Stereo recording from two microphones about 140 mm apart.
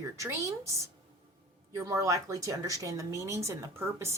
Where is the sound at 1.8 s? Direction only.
25° right (ahead or behind).